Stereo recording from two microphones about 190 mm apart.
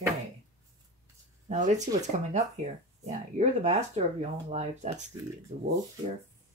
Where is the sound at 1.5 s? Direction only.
40° right (ahead or behind).